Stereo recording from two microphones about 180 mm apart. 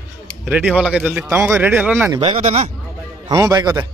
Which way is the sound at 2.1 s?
30° right (ahead or behind).